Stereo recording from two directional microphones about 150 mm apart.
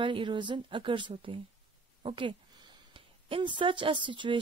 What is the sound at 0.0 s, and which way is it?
Speech, 35° right (ahead or behind).